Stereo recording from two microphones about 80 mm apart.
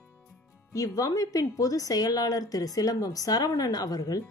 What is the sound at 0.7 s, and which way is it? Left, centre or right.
Speech, left.